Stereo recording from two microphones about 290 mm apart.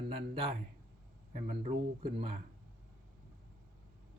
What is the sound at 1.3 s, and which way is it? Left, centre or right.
Speech, right.